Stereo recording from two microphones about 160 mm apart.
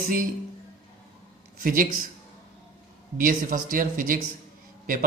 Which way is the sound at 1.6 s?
60° right (ahead or behind).